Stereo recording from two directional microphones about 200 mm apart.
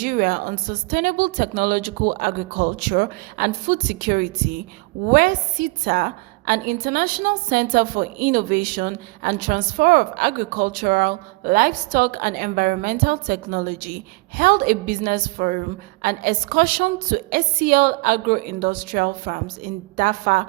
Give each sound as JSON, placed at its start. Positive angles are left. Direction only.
{"t": 0.0, "sound": "a woman's voice", "side_deg": -45}